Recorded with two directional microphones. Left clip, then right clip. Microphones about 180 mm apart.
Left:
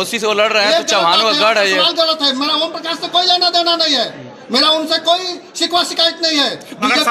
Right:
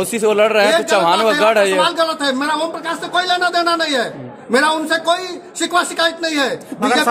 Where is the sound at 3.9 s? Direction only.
15° right (ahead or behind).